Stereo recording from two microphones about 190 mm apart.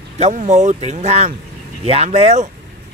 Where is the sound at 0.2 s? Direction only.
40° right (ahead or behind).